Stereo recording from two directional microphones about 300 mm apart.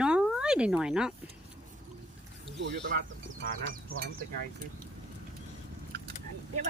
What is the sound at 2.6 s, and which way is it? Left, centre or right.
Speech, right.